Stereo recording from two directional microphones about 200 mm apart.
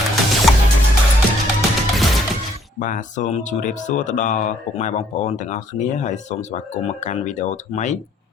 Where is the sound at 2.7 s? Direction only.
40° left (ahead or behind).